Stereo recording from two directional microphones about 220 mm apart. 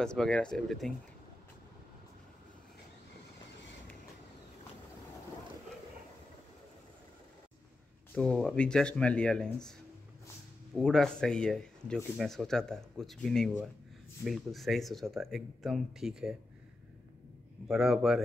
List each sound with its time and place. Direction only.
0.0 s speech: 5° left (ahead or behind)
8.1 s speech: 5° left (ahead or behind)
17.6 s speech: centre (ahead or behind)